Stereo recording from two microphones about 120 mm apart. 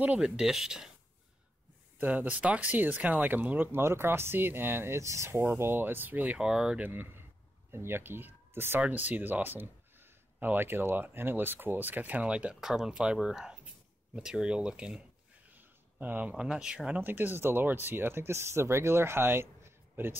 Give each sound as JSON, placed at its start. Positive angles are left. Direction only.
{"t": 0.0, "sound": "speech", "side_deg": -10}
{"t": 2.0, "sound": "speech", "side_deg": -15}